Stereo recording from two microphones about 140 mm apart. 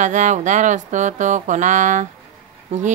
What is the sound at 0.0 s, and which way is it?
Speech, 60° right (ahead or behind).